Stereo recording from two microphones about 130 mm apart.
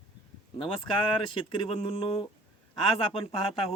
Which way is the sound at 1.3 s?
45° left (ahead or behind).